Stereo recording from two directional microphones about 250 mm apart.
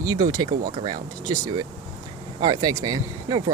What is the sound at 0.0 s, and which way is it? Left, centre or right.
Speech, centre.